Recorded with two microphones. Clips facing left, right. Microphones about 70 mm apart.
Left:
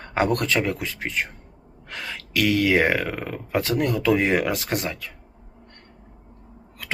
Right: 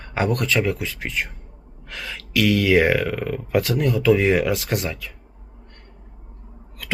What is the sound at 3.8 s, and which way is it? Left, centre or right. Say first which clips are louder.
Speech: right 2 dB; left.